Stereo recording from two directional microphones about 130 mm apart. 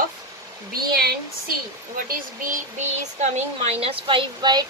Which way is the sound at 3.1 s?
60° right (ahead or behind).